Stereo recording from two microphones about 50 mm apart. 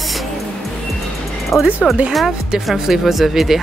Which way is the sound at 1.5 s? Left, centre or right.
Left.